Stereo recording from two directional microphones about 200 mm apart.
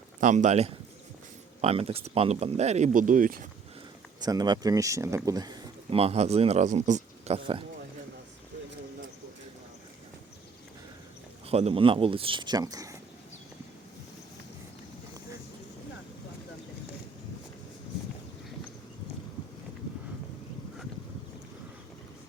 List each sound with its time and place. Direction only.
0.2 s speech: 40° right (ahead or behind)
4.2 s speech: 20° right (ahead or behind)
11.4 s speech: 30° right (ahead or behind)